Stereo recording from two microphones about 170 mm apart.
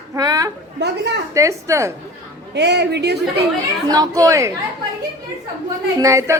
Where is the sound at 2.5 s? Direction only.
80° right.